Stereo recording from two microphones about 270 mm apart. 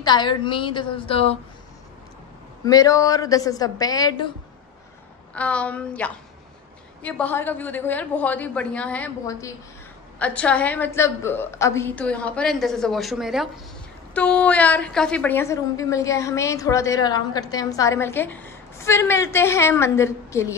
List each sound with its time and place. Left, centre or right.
0.0 s a woman's voice: centre
2.6 s a woman's voice: centre
5.3 s a woman's voice: centre